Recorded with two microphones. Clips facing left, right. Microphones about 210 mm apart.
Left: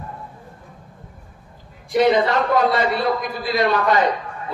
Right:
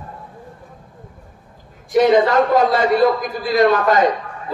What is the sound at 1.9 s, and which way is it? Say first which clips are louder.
A man's voice: right 3 dB; 45° right (ahead or behind).